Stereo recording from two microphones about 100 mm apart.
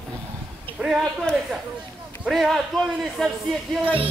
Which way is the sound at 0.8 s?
Centre (ahead or behind).